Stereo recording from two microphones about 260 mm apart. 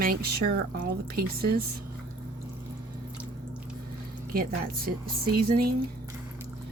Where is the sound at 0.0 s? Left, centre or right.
Right.